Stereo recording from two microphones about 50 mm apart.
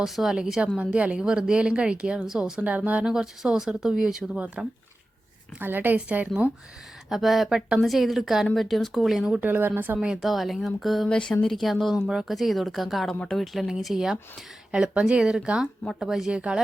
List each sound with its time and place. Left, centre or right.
0.0 s speech: centre
0.8 s speech: right
1.2 s speech: centre
2.6 s speech: right
3.0 s speech: centre
4.4 s speech: right
5.5 s speech: right
7.1 s speech: centre
8.5 s speech: centre
9.3 s speech: right
10.2 s speech: centre
11.1 s speech: centre
11.4 s speech: centre
11.9 s speech: centre